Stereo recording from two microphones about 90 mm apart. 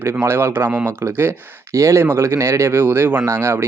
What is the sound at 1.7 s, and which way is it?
Speech, 35° right (ahead or behind).